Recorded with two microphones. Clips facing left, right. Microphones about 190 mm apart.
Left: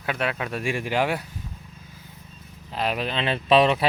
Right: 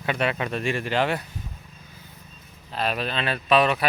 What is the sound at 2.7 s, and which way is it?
Speech, 15° left (ahead or behind).